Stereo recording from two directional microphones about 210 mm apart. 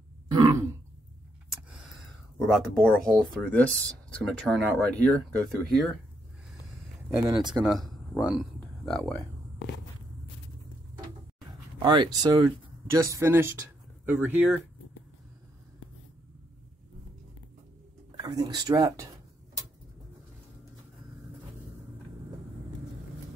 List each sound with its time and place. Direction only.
0.3 s throat clearing: 15° right (ahead or behind)
2.3 s speech: centre (ahead or behind)
7.1 s speech: 10° right (ahead or behind)
7.6 s a sound: centre (ahead or behind)
11.8 s speech: 20° right (ahead or behind)
18.1 s speech: 20° right (ahead or behind)